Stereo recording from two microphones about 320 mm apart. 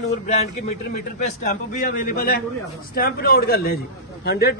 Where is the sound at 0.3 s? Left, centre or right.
Left.